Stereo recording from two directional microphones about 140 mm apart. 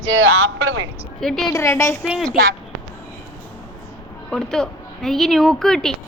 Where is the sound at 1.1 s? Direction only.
Centre (ahead or behind).